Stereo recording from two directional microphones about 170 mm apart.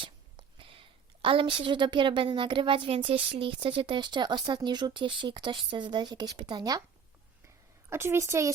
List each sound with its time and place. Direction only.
0.0 s a woman's voice: 30° right (ahead or behind)
7.9 s a woman's voice: 15° right (ahead or behind)